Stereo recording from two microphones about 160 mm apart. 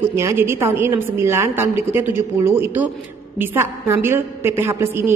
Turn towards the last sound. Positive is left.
turn(degrees=-15)  # may be behind; listen again after turning